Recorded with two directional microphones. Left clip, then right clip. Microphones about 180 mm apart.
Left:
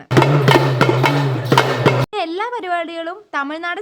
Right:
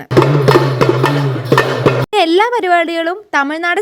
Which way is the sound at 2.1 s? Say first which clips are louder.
Right 10 dB; 40° right (ahead or behind).